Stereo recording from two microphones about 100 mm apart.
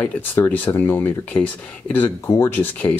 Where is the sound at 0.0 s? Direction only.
20° left (ahead or behind).